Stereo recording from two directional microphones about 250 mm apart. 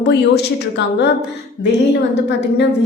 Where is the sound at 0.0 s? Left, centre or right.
Left.